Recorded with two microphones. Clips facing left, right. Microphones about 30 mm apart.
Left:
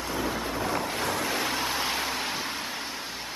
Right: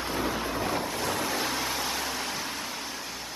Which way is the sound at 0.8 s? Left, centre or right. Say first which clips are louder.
Left 1 dB; left.